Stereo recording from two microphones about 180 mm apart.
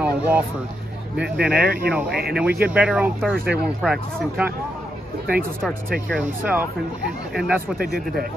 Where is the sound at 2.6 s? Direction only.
5° right (ahead or behind).